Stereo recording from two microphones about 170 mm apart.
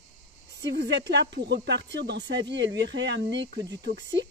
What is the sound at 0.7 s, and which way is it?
Speech, 90° right.